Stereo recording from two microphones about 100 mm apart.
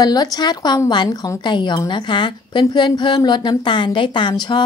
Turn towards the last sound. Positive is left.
turn(degrees=45)  # may be behind; listen again after turning